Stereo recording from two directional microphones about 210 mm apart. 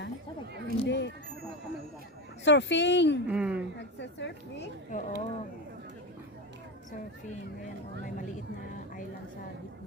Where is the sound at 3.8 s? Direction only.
55° left (ahead or behind).